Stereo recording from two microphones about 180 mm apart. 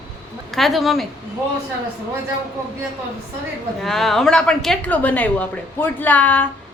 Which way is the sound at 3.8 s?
Centre (ahead or behind).